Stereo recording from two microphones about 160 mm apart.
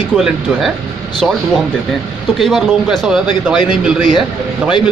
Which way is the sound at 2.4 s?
Centre (ahead or behind).